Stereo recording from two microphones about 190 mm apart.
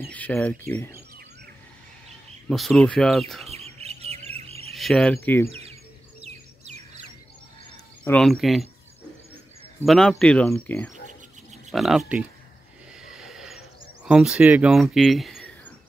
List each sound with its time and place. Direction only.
0.1 s speech: 10° left (ahead or behind)
2.5 s speech: centre (ahead or behind)
3.4 s bird: 35° right (ahead or behind)
4.7 s speech: centre (ahead or behind)
5.5 s bird: 30° right (ahead or behind)
8.0 s speech: 5° left (ahead or behind)
9.8 s speech: centre (ahead or behind)
11.7 s speech: centre (ahead or behind)
13.0 s a sound: 5° right (ahead or behind)